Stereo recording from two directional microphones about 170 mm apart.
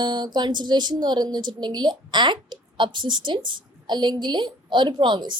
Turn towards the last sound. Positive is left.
turn(degrees=-25)  # may be behind; listen again after turning